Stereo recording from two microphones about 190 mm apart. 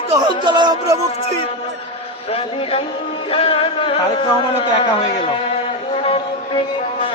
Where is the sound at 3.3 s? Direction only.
30° left (ahead or behind).